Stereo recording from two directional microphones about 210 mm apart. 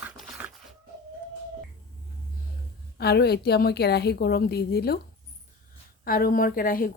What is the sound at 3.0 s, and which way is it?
A woman's voice, 50° left (ahead or behind).